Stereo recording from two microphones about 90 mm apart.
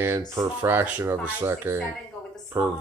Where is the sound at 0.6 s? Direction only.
25° right (ahead or behind).